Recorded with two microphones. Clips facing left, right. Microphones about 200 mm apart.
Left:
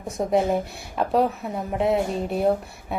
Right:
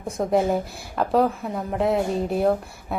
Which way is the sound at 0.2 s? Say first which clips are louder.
Even; centre (ahead or behind).